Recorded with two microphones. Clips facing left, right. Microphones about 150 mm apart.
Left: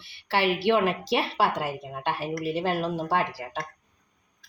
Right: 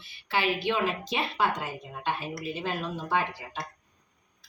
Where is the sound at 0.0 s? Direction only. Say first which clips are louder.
Left 4 dB; 70° left (ahead or behind).